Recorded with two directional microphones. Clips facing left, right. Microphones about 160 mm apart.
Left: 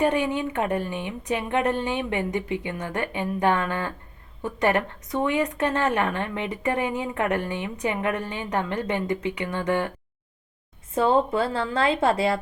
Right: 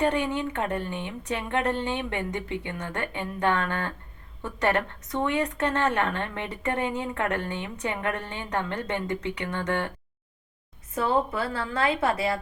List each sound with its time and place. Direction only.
0.0 s speech: 10° left (ahead or behind)
10.9 s a woman's voice: 25° left (ahead or behind)